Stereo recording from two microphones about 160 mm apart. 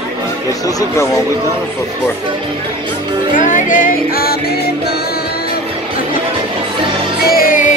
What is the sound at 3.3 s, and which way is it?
Music, 55° left (ahead or behind).